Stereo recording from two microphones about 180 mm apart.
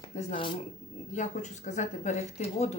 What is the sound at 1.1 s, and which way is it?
Speech, 40° left (ahead or behind).